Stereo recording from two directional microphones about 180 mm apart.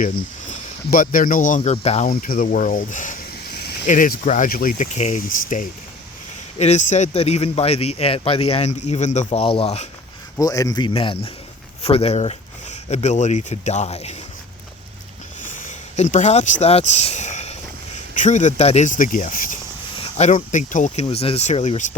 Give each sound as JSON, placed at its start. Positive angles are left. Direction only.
{"t": 0.0, "sound": "speech", "side_deg": 50}
{"t": 2.0, "sound": "speech", "side_deg": 50}
{"t": 3.3, "sound": "a sound", "side_deg": 65}
{"t": 3.8, "sound": "a man's voice", "side_deg": 45}
{"t": 10.3, "sound": "speech", "side_deg": 20}
{"t": 15.4, "sound": "speech", "side_deg": 45}
{"t": 20.0, "sound": "a man's voice", "side_deg": 35}